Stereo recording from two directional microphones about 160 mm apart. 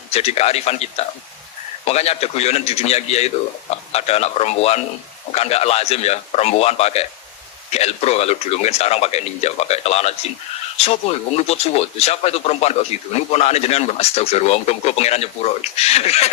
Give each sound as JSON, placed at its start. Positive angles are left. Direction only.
{"t": 0.1, "sound": "speech", "side_deg": 40}